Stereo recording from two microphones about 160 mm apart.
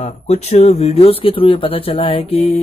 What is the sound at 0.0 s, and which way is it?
Speech, 40° left (ahead or behind).